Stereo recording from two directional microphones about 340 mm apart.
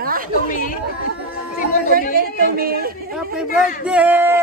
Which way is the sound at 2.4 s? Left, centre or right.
Right.